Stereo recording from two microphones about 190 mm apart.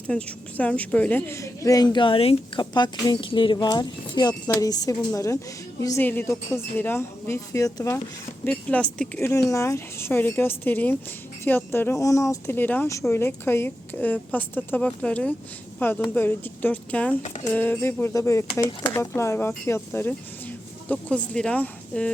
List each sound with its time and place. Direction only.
0.1 s a woman's voice: 5° left (ahead or behind)
8.4 s speech: 5° left (ahead or behind)